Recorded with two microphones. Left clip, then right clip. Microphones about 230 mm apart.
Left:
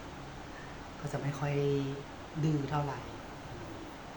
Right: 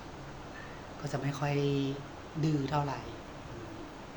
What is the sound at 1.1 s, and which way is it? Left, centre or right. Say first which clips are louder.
Speech: right 2 dB; centre.